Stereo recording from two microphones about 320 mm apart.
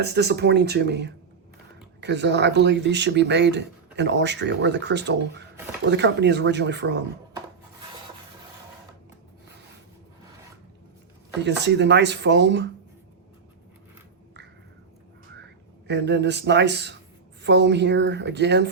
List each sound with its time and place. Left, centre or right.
0.0 s speech: right
11.4 s speech: right
15.9 s speech: right